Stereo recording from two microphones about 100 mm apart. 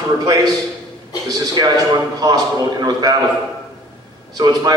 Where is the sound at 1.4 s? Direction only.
40° right (ahead or behind).